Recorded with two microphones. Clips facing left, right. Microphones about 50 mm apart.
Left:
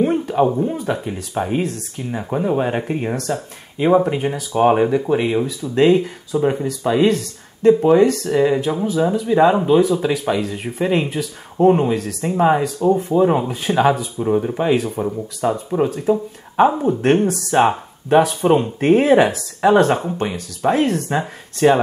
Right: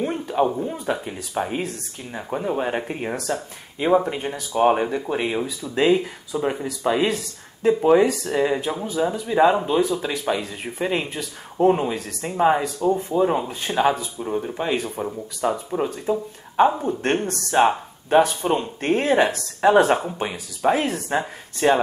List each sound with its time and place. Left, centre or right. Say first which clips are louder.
0.0 s speech: left 5 dB; centre